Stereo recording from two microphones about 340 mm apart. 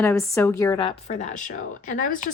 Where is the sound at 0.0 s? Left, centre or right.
Centre.